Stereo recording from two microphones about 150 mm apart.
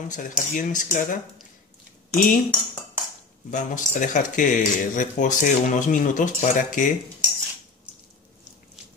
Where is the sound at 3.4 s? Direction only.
60° left (ahead or behind).